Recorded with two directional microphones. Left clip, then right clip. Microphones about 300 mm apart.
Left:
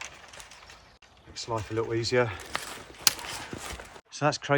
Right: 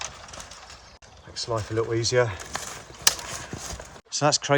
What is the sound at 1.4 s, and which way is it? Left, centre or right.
Speech, centre.